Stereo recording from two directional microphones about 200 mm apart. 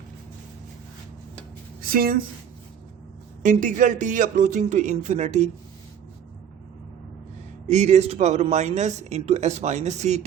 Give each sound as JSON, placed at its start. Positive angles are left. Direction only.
{"t": 1.8, "sound": "speech", "side_deg": -45}
{"t": 3.4, "sound": "speech", "side_deg": -40}
{"t": 7.7, "sound": "speech", "side_deg": -35}